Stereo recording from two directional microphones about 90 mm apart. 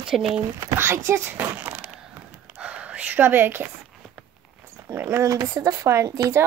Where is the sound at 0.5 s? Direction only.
30° right (ahead or behind).